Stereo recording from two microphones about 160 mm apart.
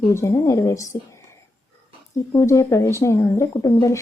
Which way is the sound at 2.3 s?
20° left (ahead or behind).